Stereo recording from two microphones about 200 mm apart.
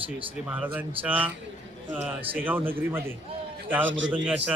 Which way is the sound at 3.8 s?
70° right (ahead or behind).